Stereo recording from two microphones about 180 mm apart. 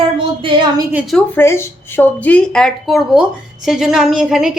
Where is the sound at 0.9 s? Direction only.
Centre (ahead or behind).